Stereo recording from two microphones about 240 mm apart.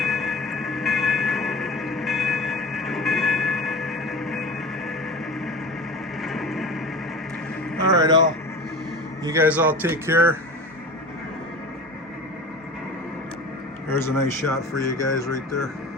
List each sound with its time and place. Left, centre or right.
0.0 s music: centre
6.2 s music: centre
7.9 s vehicle: centre
9.2 s speech: centre
13.9 s speech: centre